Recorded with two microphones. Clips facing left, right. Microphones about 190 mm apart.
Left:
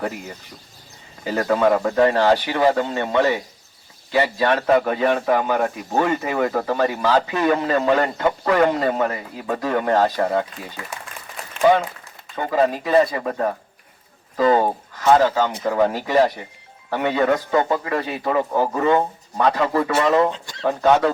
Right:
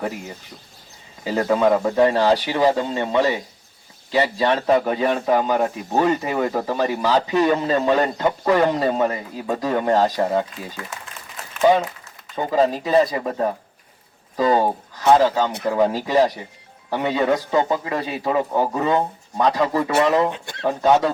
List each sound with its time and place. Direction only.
1.2 s speech: 15° right (ahead or behind)
12.4 s speech: 20° right (ahead or behind)